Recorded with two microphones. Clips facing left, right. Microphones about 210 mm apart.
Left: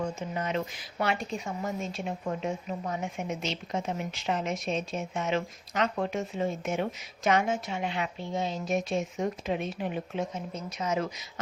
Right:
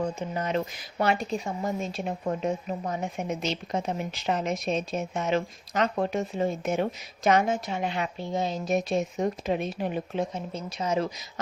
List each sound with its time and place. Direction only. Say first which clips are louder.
0.2 s speech: right 3 dB; 35° right (ahead or behind)